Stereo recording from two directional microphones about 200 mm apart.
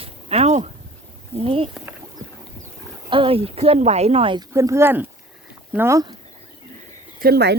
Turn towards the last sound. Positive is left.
turn(degrees=-55)  # may be behind; listen again after turning